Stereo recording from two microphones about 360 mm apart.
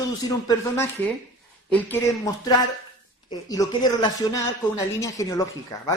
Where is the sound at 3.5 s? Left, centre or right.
Centre.